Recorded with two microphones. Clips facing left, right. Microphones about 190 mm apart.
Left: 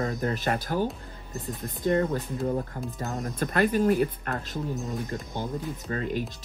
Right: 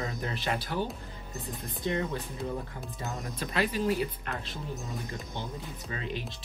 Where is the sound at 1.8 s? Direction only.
45° left (ahead or behind).